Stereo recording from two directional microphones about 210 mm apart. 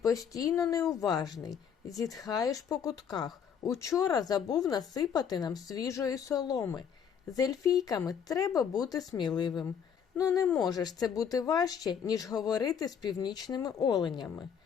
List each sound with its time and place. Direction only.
0.0 s speech: 15° left (ahead or behind)